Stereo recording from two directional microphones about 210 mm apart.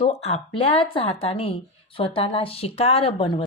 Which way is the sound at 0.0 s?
30° left (ahead or behind).